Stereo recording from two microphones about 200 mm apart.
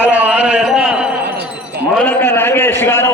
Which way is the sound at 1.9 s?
10° left (ahead or behind).